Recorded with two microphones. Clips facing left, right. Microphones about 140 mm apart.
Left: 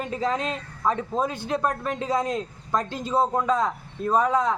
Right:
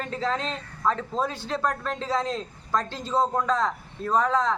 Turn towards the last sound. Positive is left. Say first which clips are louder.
# left 2 dB
turn(degrees=10)  # may be behind; listen again after turning